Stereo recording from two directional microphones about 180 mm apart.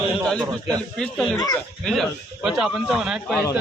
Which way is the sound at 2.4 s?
Centre (ahead or behind).